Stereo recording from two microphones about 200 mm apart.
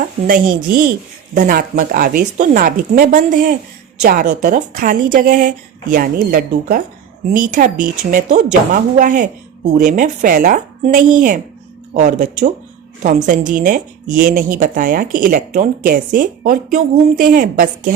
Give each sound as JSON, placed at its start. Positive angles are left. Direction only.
{"t": 0.3, "sound": "speech", "side_deg": -45}